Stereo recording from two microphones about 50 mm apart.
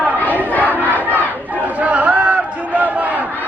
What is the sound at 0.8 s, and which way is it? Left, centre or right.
Crowd, left.